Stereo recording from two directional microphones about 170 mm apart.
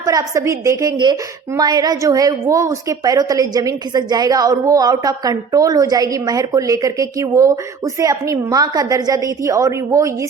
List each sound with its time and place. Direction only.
0.0 s a woman's voice: 20° right (ahead or behind)